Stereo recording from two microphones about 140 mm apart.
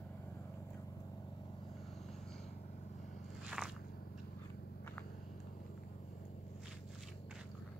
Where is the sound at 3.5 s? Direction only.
5° right (ahead or behind).